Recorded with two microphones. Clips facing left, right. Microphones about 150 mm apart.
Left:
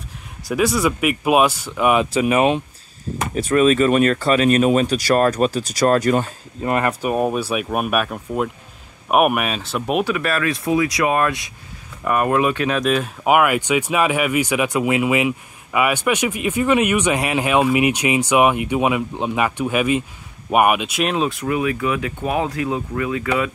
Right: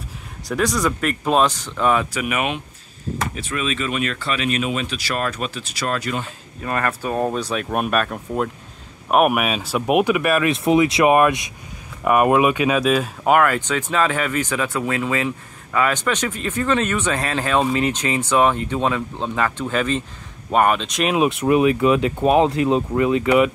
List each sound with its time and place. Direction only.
0.5 s speech: 5° left (ahead or behind)
2.1 s speech: 30° left (ahead or behind)
3.3 s speech: 45° left (ahead or behind)
6.6 s speech: 20° left (ahead or behind); by 13.1 s 5° right (ahead or behind)
13.2 s speech: 10° left (ahead or behind)
21.3 s speech: 25° right (ahead or behind)